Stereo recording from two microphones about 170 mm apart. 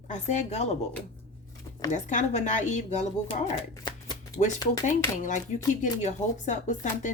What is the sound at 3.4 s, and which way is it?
Shuffling cards, 25° left (ahead or behind).